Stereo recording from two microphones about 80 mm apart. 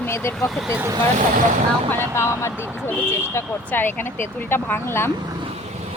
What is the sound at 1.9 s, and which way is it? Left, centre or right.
Speech, left.